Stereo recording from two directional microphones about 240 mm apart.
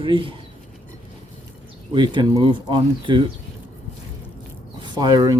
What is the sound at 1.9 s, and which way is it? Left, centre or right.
Speech, centre.